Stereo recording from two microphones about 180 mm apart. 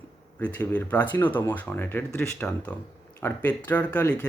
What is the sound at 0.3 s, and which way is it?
Speech, 10° left (ahead or behind).